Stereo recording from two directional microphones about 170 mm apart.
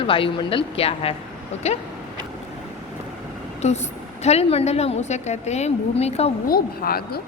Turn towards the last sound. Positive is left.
turn(degrees=60)  # may be behind; listen again after turning